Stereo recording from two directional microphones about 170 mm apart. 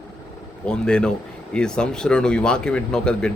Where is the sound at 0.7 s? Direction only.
5° left (ahead or behind).